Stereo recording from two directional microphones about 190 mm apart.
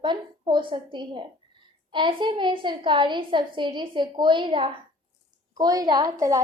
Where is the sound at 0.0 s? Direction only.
25° right (ahead or behind).